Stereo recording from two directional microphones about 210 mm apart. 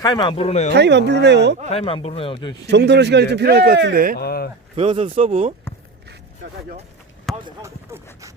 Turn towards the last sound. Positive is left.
turn(degrees=0)  # may be behind; listen again after turning